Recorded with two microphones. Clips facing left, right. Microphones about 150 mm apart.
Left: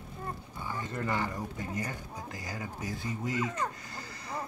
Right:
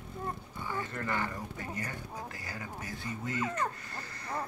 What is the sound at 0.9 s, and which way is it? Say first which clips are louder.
Speech: left 5 dB; 15° left (ahead or behind).